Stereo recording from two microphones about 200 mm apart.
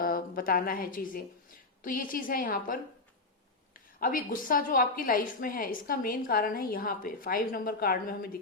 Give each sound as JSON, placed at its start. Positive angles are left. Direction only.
{"t": 0.0, "sound": "a woman's voice", "side_deg": 45}
{"t": 4.0, "sound": "a woman's voice", "side_deg": 45}